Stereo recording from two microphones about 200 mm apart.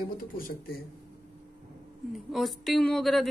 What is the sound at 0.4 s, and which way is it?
Speech, 50° left (ahead or behind).